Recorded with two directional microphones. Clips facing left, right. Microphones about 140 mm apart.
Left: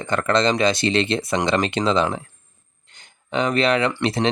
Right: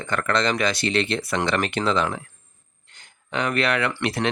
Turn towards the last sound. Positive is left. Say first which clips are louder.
# left 3 dB
turn(degrees=25)  # may be behind; listen again after turning